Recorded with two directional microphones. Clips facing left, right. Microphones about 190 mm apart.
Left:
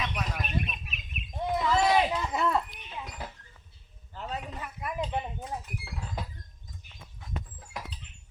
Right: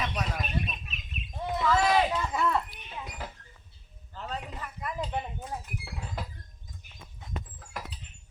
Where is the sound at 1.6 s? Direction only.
20° left (ahead or behind).